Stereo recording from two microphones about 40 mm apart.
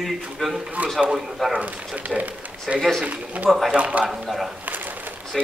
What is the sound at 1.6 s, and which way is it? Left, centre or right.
Speech, right.